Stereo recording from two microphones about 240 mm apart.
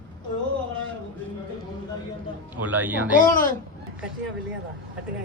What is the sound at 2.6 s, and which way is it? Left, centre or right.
Speech, centre.